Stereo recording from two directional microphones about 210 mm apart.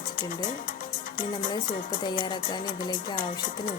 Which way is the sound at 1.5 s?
20° left (ahead or behind).